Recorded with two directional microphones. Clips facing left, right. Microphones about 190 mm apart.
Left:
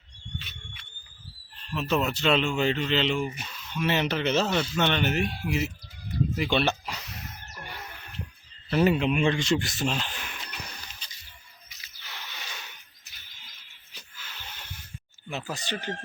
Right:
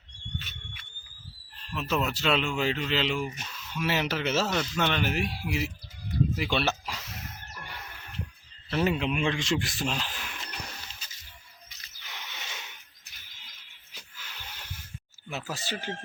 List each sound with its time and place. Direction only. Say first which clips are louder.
1.7 s speech: left 3 dB; centre (ahead or behind)
6.3 s a sound: left 3 dB; centre (ahead or behind)
8.7 s speech: left 4 dB; centre (ahead or behind)
12.0 s squish: even; 15° right (ahead or behind)
14.2 s music: left 1 dB; 10° right (ahead or behind)
15.3 s speech: left 2 dB; centre (ahead or behind)